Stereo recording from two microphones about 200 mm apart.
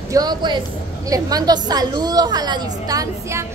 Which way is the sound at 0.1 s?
20° right (ahead or behind).